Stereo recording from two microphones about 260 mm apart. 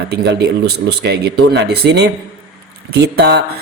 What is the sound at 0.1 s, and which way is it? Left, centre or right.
Speech, right.